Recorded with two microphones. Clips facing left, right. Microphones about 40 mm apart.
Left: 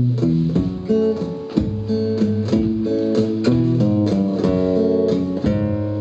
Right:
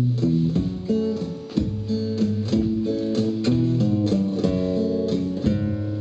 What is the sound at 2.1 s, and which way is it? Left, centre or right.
Music, centre.